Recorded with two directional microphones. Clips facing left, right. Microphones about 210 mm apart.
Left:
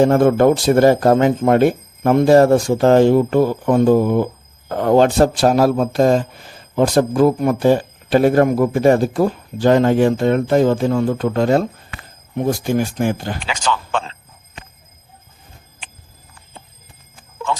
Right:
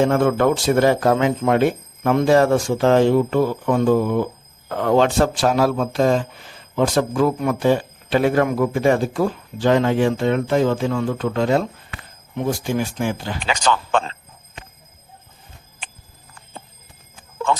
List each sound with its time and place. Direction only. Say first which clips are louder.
0.0 s a man's voice: left 4 dB; 40° left (ahead or behind)
13.5 s speech: right 3 dB; 45° right (ahead or behind)